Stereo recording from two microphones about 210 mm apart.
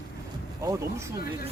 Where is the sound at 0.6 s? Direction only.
15° right (ahead or behind).